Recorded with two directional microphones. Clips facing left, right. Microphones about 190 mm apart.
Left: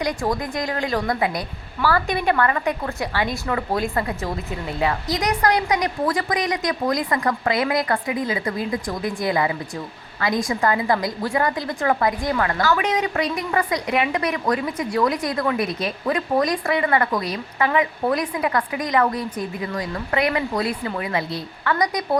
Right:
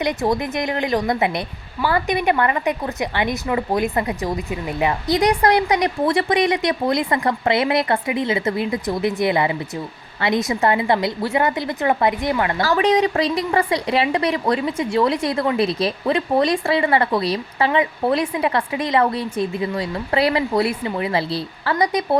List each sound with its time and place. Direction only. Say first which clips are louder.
0.0 s a woman's voice: right 3 dB; 20° right (ahead or behind)
5.0 s a woman's voice: right 8 dB; 30° right (ahead or behind)
12.6 s a woman's voice: right 7 dB; 30° right (ahead or behind)